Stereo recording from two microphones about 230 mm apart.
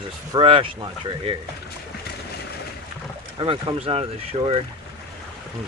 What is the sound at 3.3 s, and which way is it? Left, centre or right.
Speech, right.